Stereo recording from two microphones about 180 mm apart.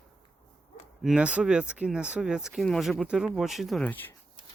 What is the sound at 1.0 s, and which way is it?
Speech, 5° right (ahead or behind).